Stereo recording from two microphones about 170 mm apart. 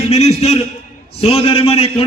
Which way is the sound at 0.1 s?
40° left (ahead or behind).